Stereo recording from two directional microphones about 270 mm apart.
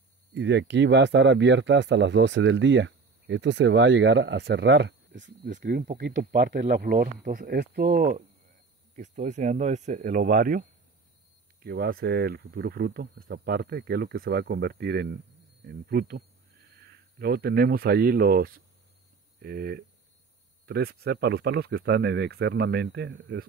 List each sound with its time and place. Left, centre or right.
0.3 s speech: right
11.6 s speech: right